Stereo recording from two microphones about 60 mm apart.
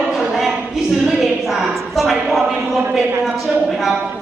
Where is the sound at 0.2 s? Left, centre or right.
Centre.